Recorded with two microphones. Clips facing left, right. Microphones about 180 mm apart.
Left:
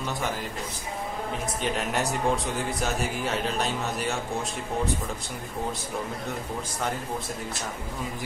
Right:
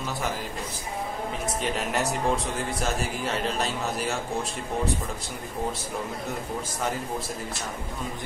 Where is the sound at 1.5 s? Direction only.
Centre (ahead or behind).